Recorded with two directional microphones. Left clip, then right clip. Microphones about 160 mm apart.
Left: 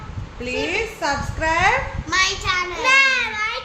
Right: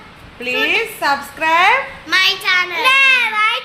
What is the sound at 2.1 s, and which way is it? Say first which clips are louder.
Speech: right 6 dB; 20° left (ahead or behind).